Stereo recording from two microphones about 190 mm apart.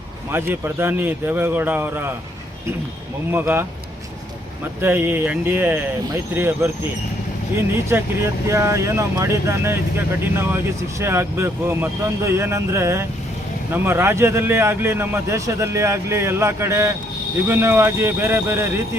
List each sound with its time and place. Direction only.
0.3 s a man's voice: 10° right (ahead or behind)
3.3 s a man's voice: 10° right (ahead or behind)
4.8 s a man's voice: 10° right (ahead or behind)
7.9 s a man's voice: 15° right (ahead or behind)
11.0 s a man's voice: 15° right (ahead or behind)